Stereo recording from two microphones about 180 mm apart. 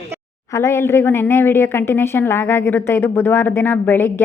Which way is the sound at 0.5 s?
15° left (ahead or behind).